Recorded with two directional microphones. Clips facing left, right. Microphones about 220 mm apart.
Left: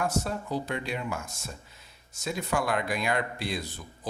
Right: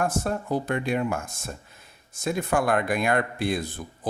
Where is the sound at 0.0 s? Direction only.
50° right (ahead or behind).